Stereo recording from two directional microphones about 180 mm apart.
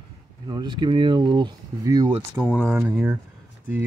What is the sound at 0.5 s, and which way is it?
Speech, 25° right (ahead or behind).